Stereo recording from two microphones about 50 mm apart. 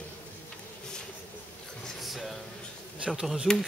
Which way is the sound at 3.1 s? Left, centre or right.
Centre.